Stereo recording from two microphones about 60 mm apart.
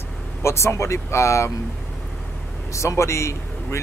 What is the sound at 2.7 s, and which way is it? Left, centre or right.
A man's voice, left.